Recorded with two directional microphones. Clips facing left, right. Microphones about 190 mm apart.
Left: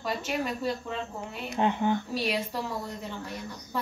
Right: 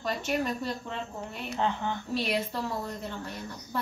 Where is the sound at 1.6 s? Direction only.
15° left (ahead or behind).